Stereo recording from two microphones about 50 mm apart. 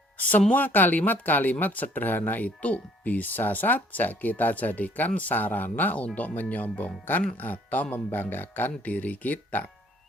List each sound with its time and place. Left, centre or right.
0.2 s speech: left